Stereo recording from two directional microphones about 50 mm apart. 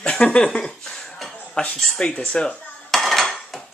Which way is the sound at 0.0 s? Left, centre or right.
Centre.